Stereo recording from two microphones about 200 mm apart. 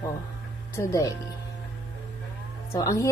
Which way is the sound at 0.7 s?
15° left (ahead or behind).